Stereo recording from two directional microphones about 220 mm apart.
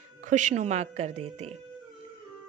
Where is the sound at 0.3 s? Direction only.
35° right (ahead or behind).